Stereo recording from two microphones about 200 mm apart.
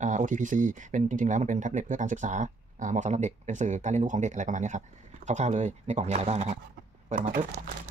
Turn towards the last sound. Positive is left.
turn(degrees=-40)  # may be behind; listen again after turning